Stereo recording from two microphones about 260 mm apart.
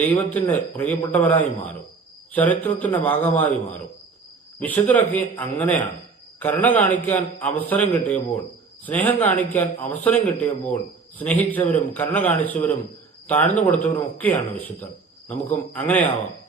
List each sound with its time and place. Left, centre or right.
0.0 s a man's voice: centre
4.6 s a man's voice: centre